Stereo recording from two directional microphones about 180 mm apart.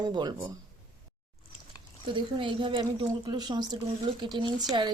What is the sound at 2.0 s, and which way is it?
Speech, 30° right (ahead or behind).